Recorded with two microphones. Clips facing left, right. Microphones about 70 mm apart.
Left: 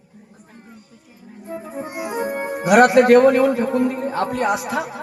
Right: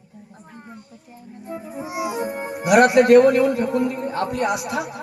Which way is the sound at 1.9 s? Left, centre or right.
Right.